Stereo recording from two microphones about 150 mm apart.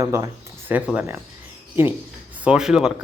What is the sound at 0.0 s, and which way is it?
Speech, 20° right (ahead or behind).